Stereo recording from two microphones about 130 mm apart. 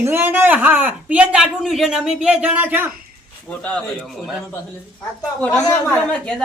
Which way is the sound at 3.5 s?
10° left (ahead or behind).